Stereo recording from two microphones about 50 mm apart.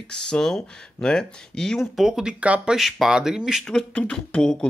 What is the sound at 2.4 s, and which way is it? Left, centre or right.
Speech, right.